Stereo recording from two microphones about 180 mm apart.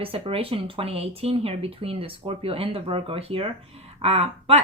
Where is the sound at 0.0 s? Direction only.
30° right (ahead or behind).